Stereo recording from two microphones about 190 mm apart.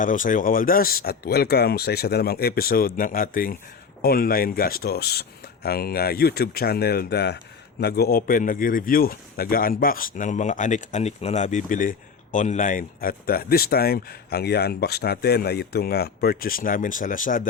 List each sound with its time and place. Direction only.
0.0 s speech: 45° left (ahead or behind)